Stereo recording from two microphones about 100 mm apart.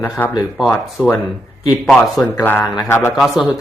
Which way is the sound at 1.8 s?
5° left (ahead or behind).